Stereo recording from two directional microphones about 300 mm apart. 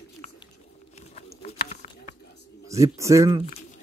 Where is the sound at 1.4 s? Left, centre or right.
Left.